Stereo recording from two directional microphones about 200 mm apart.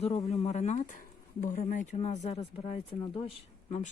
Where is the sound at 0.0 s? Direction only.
30° left (ahead or behind).